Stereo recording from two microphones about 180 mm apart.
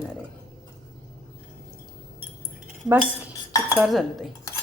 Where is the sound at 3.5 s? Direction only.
15° left (ahead or behind).